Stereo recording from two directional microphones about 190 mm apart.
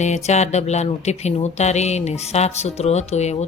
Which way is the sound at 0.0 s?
35° left (ahead or behind).